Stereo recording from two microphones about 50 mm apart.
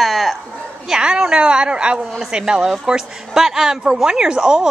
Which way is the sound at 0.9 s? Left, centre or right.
Centre.